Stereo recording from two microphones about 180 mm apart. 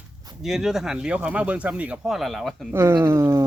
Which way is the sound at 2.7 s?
15° right (ahead or behind).